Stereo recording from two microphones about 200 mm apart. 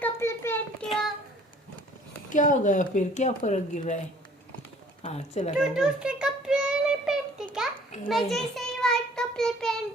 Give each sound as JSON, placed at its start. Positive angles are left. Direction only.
{"t": 0.0, "sound": "child singing", "side_deg": 10}
{"t": 2.3, "sound": "speech", "side_deg": 40}
{"t": 5.0, "sound": "speech", "side_deg": 35}
{"t": 5.5, "sound": "child singing", "side_deg": -5}